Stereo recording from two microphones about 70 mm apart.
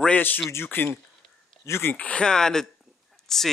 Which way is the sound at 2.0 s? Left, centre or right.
Centre.